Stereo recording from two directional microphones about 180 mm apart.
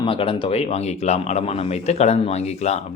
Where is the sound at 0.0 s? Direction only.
30° left (ahead or behind).